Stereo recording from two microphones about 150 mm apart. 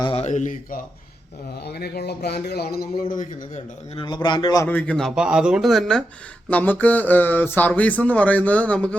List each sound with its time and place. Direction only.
0.0 s a sound: 35° left (ahead or behind)
0.3 s speech: 55° left (ahead or behind)
1.6 s a man's voice: 90° left; by 3.6 s 60° left (ahead or behind)
3.9 s a man's voice: 30° left (ahead or behind)
4.6 s speech: 10° left (ahead or behind)